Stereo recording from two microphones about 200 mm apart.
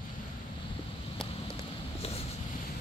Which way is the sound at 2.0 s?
30° left (ahead or behind).